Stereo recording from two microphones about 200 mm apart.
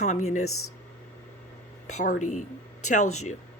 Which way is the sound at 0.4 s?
90° left.